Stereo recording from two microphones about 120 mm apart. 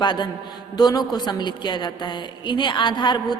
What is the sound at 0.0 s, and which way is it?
A woman's voice, 40° left (ahead or behind).